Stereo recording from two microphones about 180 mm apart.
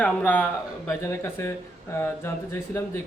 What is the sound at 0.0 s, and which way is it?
Speech, 10° left (ahead or behind).